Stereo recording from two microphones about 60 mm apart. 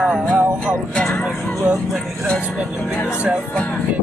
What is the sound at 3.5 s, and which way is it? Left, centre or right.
Music, centre.